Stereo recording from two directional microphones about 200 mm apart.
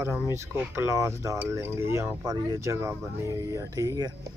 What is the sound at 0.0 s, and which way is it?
Speech, 10° right (ahead or behind).